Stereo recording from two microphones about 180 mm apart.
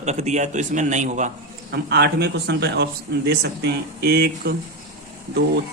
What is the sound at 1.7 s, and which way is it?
Speech, 65° right (ahead or behind).